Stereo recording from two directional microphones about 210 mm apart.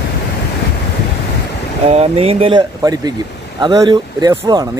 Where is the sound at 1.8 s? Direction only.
30° right (ahead or behind).